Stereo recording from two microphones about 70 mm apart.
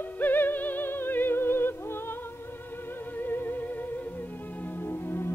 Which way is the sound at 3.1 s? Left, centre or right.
Left.